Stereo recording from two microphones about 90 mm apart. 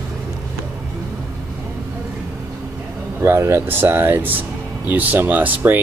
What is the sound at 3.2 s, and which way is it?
Speech, 30° right (ahead or behind).